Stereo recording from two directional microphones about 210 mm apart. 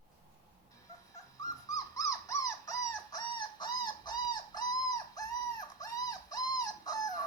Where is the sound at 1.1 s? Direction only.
15° left (ahead or behind).